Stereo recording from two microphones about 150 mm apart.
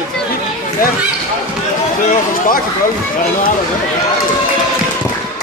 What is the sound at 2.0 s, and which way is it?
Speech, 65° left (ahead or behind).